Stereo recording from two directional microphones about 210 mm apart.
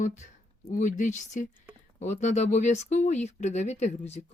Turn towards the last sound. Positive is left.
turn(degrees=35)  # may be behind; listen again after turning